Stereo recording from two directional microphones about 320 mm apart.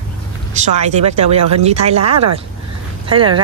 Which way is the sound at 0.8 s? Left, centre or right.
Right.